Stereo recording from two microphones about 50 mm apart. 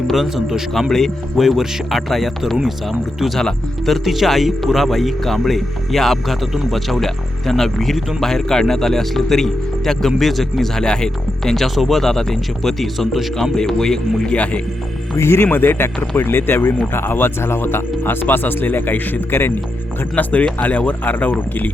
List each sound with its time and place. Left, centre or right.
0.1 s speech: centre
10.8 s speech: centre
14.3 s speech: left
15.1 s speech: left
15.4 s speech: left
20.0 s speech: left